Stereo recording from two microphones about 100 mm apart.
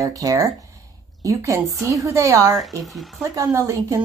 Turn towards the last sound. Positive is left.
turn(degrees=-35)  # may be behind; listen again after turning